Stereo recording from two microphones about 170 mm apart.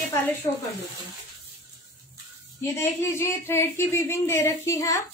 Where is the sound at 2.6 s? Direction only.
15° left (ahead or behind).